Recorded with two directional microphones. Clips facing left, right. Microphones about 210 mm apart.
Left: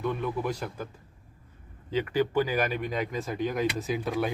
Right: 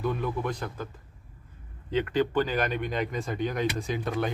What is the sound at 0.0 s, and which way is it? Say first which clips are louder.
Speech: even; centre (ahead or behind).